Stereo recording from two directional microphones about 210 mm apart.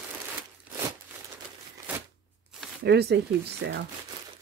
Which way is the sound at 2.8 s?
50° right (ahead or behind).